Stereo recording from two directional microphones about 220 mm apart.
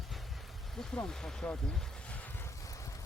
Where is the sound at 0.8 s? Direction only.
Centre (ahead or behind).